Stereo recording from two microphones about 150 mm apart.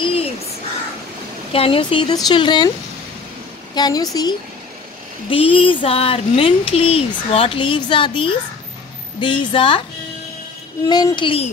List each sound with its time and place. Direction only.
0.0 s a sound: 40° left (ahead or behind)
1.5 s speech: 35° left (ahead or behind)
3.7 s speech: 25° left (ahead or behind)
5.3 s speech: 35° left (ahead or behind)
10.9 s speech: 25° left (ahead or behind)